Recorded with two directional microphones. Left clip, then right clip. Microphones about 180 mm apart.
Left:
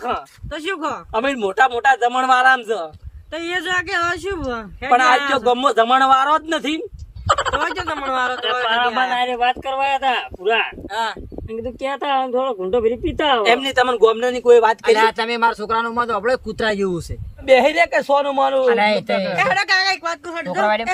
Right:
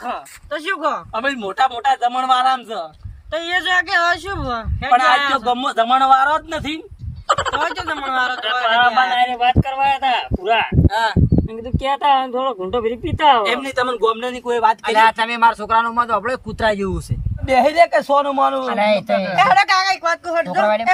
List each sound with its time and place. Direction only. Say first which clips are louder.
0.5 s speech: right 3 dB; centre (ahead or behind)
1.1 s a man's voice: left 2 dB; 15° left (ahead or behind)
3.3 s speech: right 4 dB; 5° right (ahead or behind)
5.5 s a man's voice: left 1 dB; 15° left (ahead or behind); by 13.4 s 5° right (ahead or behind)
13.6 s a man's voice: left 4 dB; 20° left (ahead or behind)
14.9 s a man's voice: right 3 dB; centre (ahead or behind)
19.4 s a man's voice: right 5 dB; 10° right (ahead or behind)
20.6 s a man's voice: even; 10° left (ahead or behind)